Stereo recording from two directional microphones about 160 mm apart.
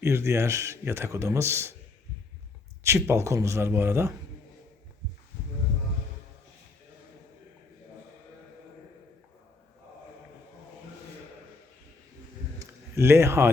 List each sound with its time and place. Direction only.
0.0 s a man's voice: 15° right (ahead or behind)
2.8 s a man's voice: 15° right (ahead or behind)
12.5 s a sound: 15° right (ahead or behind)